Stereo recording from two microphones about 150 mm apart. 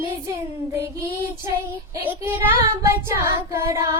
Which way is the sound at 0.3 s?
15° right (ahead or behind).